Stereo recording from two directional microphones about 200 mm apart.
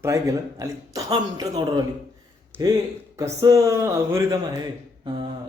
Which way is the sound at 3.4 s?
15° right (ahead or behind).